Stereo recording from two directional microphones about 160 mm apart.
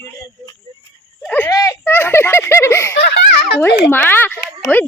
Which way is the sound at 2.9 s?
90° left.